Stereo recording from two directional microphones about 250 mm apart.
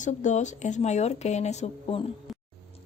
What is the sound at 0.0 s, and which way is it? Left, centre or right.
Speech, left.